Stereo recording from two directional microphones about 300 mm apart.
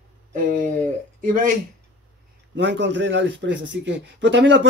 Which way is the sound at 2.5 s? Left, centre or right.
Right.